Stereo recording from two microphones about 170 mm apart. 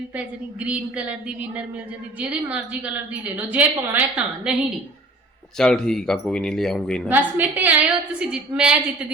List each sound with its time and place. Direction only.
0.2 s a woman's voice: 5° right (ahead or behind)
5.5 s speech: 5° left (ahead or behind)
7.1 s a woman's voice: 10° right (ahead or behind)